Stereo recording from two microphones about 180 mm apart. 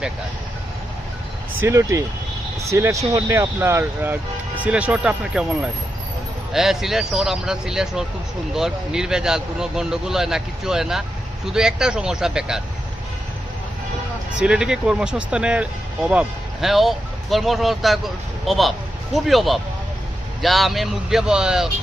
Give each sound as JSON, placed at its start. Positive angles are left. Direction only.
{"t": 1.6, "sound": "speech", "side_deg": -15}
{"t": 14.3, "sound": "speech", "side_deg": -5}